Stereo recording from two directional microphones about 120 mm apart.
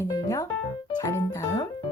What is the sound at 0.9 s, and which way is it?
Music, 25° left (ahead or behind).